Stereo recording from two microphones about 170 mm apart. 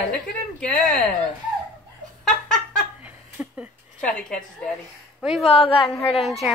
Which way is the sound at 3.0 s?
10° right (ahead or behind).